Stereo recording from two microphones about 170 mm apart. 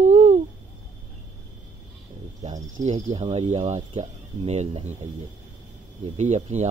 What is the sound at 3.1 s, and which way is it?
Speech, 40° right (ahead or behind).